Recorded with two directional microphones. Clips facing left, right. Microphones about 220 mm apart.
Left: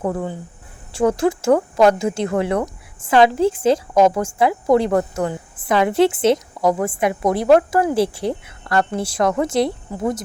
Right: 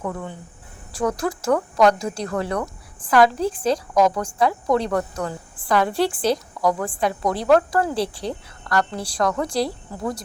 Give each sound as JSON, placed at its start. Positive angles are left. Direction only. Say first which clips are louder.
{"t": 0.0, "sound": "a woman's voice", "louder": "left 6 dB", "side_deg": 35}